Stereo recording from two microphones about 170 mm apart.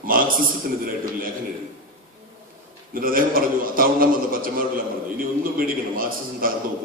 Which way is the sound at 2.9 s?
55° right (ahead or behind).